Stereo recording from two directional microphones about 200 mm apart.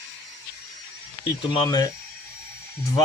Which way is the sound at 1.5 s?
20° left (ahead or behind).